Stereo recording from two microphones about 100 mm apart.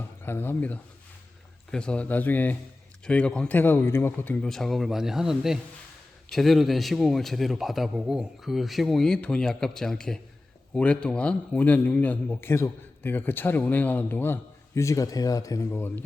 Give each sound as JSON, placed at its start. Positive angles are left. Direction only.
{"t": 0.2, "sound": "speech", "side_deg": 20}
{"t": 3.6, "sound": "a man's voice", "side_deg": 20}
{"t": 4.4, "sound": "a man's voice", "side_deg": 5}
{"t": 14.8, "sound": "speech", "side_deg": 30}